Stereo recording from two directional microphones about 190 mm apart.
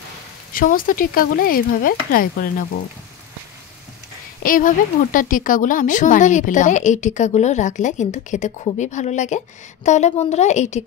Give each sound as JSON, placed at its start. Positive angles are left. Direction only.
{"t": 0.5, "sound": "speech", "side_deg": 45}
{"t": 4.4, "sound": "a woman's voice", "side_deg": 45}